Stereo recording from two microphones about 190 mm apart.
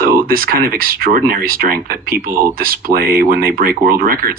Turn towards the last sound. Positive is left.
turn(degrees=-50)  # may be behind; listen again after turning